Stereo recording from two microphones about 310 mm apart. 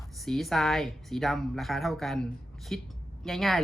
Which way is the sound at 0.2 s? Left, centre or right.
Centre.